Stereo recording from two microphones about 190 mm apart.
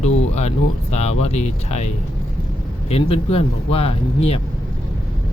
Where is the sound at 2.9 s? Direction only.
30° left (ahead or behind).